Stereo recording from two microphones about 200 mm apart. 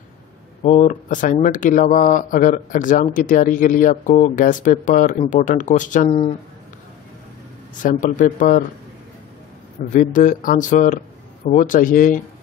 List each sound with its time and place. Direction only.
0.7 s speech: 40° left (ahead or behind)
7.8 s speech: 40° left (ahead or behind)
9.8 s speech: 40° left (ahead or behind)